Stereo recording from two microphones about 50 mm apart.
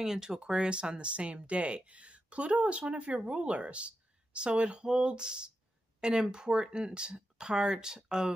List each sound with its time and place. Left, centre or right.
0.0 s speech: centre